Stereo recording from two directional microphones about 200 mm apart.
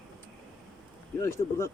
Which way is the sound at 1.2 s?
15° left (ahead or behind).